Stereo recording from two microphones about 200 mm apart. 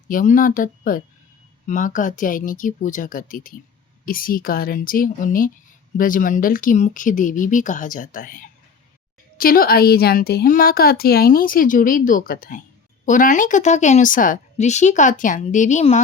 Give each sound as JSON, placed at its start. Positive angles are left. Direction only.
{"t": 0.1, "sound": "a woman's voice", "side_deg": 45}